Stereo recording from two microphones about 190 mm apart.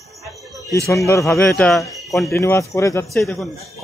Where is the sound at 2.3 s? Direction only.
15° left (ahead or behind).